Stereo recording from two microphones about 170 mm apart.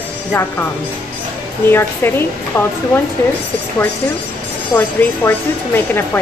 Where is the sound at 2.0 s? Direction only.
15° left (ahead or behind).